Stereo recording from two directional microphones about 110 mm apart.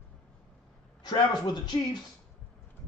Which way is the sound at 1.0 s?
40° left (ahead or behind).